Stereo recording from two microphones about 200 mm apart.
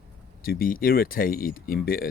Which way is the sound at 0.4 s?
45° left (ahead or behind).